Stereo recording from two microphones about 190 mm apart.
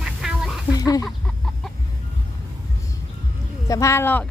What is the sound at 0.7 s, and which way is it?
Chicken, 20° left (ahead or behind).